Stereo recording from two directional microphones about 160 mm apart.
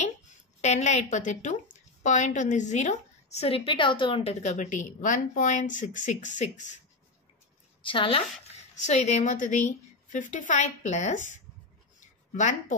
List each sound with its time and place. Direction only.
0.0 s a woman's voice: 45° left (ahead or behind)
7.8 s speech: 30° left (ahead or behind)
8.7 s a woman's voice: 45° left (ahead or behind)
12.4 s a woman's voice: 50° left (ahead or behind)